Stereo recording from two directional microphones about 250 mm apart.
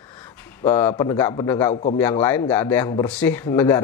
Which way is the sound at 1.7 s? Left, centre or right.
Left.